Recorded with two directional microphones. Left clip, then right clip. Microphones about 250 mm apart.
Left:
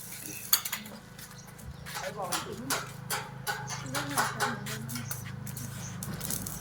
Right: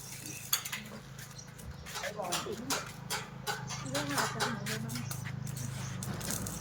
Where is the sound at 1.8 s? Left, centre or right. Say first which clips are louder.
Left 2 dB; centre.